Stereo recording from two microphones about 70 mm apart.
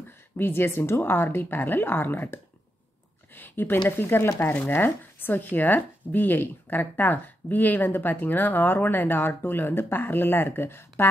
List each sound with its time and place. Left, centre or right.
0.4 s a woman's voice: left